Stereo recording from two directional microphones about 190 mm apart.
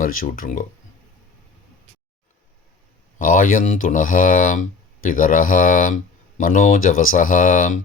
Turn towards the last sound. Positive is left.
turn(degrees=45)  # may be behind; listen again after turning